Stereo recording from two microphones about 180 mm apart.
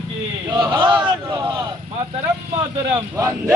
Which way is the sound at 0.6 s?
25° right (ahead or behind).